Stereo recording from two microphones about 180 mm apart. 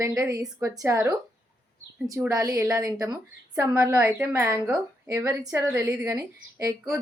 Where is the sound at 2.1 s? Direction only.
15° right (ahead or behind).